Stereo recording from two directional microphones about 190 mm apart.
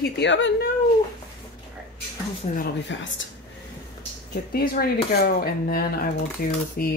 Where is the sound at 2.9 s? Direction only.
75° left (ahead or behind).